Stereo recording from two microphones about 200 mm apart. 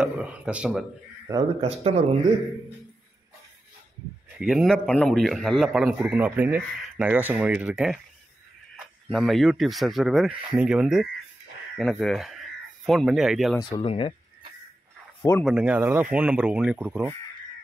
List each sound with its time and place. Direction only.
0.0 s a man's voice: 5° right (ahead or behind)
1.6 s speech: 30° right (ahead or behind)
4.4 s a man's voice: 5° right (ahead or behind)
13.6 s speech: 25° left (ahead or behind)
15.4 s speech: 5° right (ahead or behind)